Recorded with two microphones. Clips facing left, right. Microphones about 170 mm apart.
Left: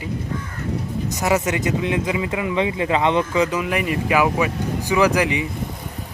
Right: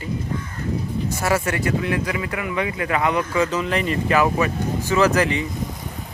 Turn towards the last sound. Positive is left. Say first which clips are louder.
# even
turn(degrees=15)  # may be behind; listen again after turning